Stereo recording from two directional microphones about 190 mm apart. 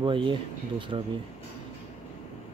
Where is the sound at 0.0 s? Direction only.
25° right (ahead or behind).